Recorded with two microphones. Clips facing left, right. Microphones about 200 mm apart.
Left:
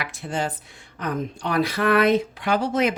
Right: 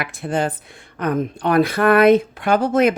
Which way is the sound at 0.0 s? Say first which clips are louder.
Right 6 dB; 55° right (ahead or behind).